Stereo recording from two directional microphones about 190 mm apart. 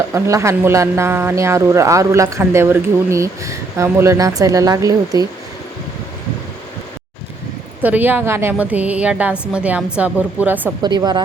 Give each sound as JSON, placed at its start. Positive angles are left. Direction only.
{"t": 0.1, "sound": "speech", "side_deg": -15}
{"t": 7.8, "sound": "speech", "side_deg": -10}
{"t": 10.8, "sound": "a woman's voice", "side_deg": -20}